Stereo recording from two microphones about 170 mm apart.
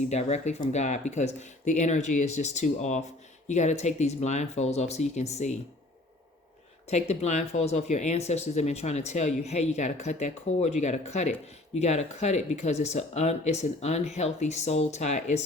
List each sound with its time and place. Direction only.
0.0 s speech: 40° left (ahead or behind)
6.9 s speech: 40° left (ahead or behind)